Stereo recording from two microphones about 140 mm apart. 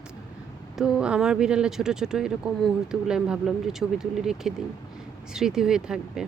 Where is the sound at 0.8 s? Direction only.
5° right (ahead or behind).